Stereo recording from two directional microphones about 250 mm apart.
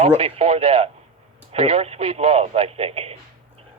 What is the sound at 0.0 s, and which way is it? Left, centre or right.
Speech, right.